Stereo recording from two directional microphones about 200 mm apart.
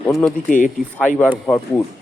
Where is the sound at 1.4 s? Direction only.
5° left (ahead or behind).